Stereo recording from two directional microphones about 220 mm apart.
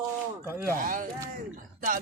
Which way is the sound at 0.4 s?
15° right (ahead or behind).